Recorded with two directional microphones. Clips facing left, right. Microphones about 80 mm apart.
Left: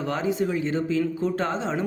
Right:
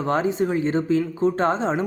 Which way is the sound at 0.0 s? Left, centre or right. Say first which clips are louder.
Right 4 dB; right.